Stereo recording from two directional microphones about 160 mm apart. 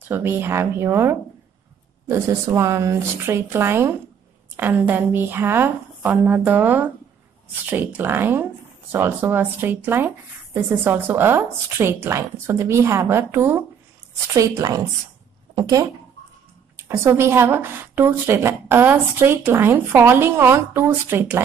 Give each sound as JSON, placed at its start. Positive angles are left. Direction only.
{"t": 0.1, "sound": "a woman's voice", "side_deg": -15}